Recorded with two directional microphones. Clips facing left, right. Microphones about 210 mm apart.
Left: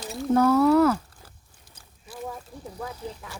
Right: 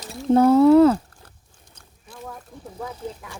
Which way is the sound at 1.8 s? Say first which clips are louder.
Left 2 dB; 5° left (ahead or behind).